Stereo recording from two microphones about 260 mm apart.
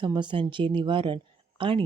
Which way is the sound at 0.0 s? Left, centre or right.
Centre.